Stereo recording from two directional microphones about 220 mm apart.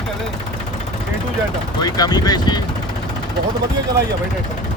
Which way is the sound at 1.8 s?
20° left (ahead or behind).